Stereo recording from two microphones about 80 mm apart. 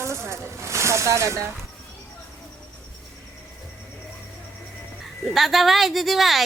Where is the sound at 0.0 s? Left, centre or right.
Right.